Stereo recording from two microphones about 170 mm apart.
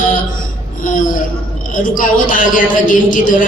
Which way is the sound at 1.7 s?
50° left (ahead or behind).